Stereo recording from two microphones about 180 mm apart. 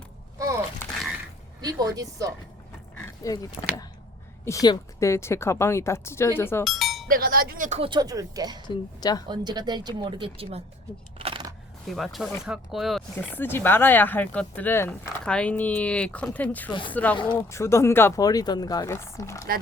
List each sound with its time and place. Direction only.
0.3 s a sound: 20° right (ahead or behind)
1.6 s speech: 20° right (ahead or behind)
3.2 s speech: 20° left (ahead or behind)
6.7 s music: centre (ahead or behind)
7.1 s speech: 55° right (ahead or behind)
7.8 s speech: 25° right (ahead or behind)
8.6 s speech: 25° left (ahead or behind)
9.3 s speech: 25° right (ahead or behind)
11.2 s a sound: 30° right (ahead or behind)
11.9 s speech: centre (ahead or behind)
13.1 s speech: 10° left (ahead or behind)